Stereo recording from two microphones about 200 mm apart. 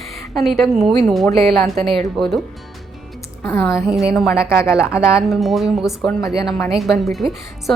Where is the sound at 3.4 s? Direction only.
10° left (ahead or behind).